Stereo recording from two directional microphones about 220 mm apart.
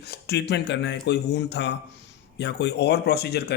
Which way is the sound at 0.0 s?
45° left (ahead or behind).